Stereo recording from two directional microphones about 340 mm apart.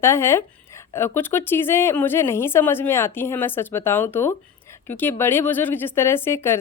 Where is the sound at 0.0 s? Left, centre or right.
Centre.